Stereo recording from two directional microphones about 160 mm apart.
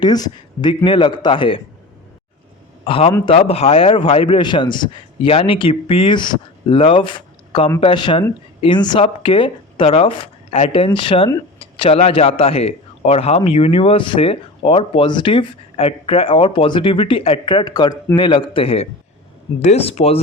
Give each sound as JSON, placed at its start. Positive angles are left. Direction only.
{"t": 0.0, "sound": "a man's voice", "side_deg": 25}
{"t": 2.8, "sound": "a man's voice", "side_deg": 35}